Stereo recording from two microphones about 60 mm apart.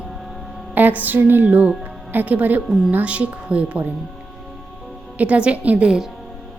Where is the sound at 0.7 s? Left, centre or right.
Right.